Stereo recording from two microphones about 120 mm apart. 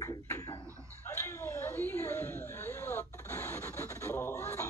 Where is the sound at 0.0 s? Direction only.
30° left (ahead or behind).